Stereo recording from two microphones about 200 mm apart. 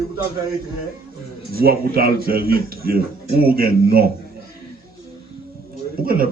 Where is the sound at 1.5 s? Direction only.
50° right (ahead or behind).